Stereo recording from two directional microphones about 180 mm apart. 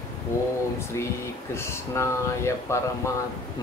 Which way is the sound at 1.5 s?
15° left (ahead or behind).